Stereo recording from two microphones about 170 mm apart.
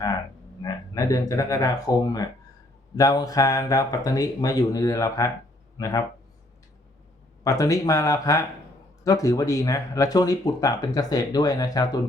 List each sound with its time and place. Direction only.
0.6 s speech: 20° left (ahead or behind)
7.4 s speech: 20° left (ahead or behind)